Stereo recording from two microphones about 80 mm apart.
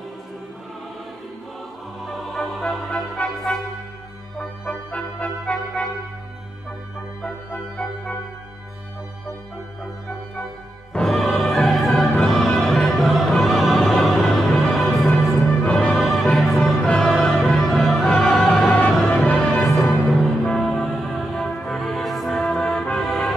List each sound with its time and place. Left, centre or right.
2.0 s music: centre
2.9 s music: centre
4.6 s brass instrument: centre
10.9 s music: centre
22.8 s brass instrument: centre